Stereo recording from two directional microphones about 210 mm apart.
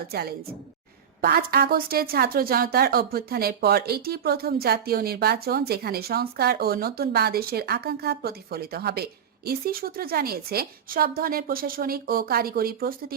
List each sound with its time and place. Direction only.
0.1 s a woman's voice: 50° right (ahead or behind)